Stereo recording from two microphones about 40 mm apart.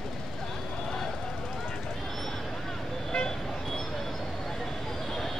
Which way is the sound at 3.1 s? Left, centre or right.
Left.